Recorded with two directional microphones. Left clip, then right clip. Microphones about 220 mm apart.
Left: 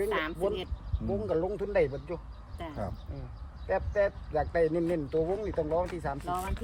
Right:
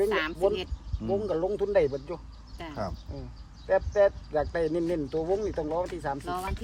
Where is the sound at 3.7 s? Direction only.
50° right (ahead or behind).